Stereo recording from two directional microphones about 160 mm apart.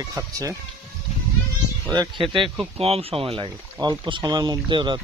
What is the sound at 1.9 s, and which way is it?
Speech, 30° right (ahead or behind).